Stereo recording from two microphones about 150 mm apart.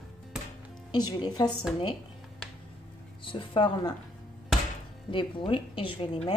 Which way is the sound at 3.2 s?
35° left (ahead or behind).